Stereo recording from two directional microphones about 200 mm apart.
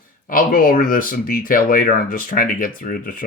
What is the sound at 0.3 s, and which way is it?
Speech, 45° left (ahead or behind).